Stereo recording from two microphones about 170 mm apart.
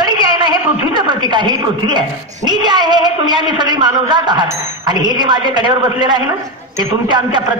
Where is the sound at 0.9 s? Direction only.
25° right (ahead or behind).